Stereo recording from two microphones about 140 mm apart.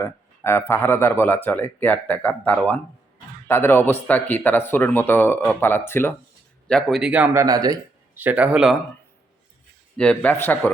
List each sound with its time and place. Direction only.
0.0 s speech: 15° left (ahead or behind)
6.7 s speech: 5° left (ahead or behind)
7.3 s speech: 25° right (ahead or behind)
8.1 s speech: 15° right (ahead or behind)
10.0 s speech: 10° left (ahead or behind)